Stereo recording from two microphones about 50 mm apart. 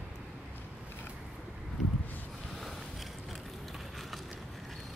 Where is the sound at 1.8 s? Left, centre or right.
Centre.